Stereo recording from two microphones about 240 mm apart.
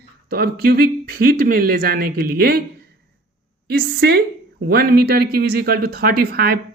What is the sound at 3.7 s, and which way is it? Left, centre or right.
Speech, right.